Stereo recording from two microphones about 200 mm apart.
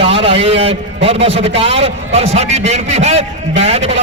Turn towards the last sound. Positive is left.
turn(degrees=-30)  # may be behind; listen again after turning